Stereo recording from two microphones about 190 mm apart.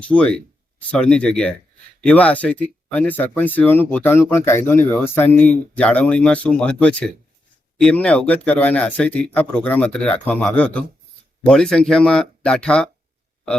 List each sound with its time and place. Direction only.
0.0 s speech: 5° left (ahead or behind)